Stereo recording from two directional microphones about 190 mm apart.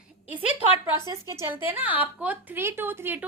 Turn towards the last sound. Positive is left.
turn(degrees=-10)  # may be behind; listen again after turning